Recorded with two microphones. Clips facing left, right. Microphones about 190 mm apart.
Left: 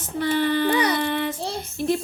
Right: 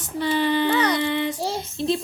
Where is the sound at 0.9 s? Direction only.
15° right (ahead or behind).